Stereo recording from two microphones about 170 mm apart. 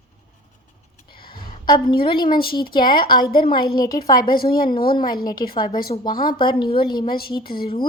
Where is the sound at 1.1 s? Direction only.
30° left (ahead or behind).